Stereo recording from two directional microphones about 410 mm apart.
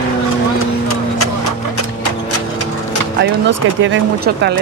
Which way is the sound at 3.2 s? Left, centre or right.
Right.